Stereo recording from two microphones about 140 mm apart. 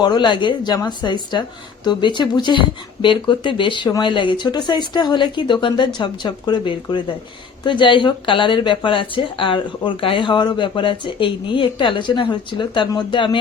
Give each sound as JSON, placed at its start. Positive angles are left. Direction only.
{"t": 0.0, "sound": "speech", "side_deg": 30}